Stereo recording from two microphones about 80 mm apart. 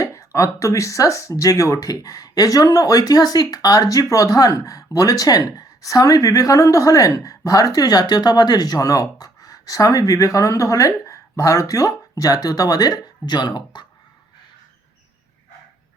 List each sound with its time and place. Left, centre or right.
0.0 s speech: left